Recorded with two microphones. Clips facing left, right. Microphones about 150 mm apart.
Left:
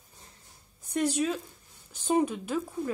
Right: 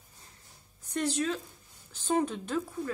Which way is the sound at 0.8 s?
15° left (ahead or behind).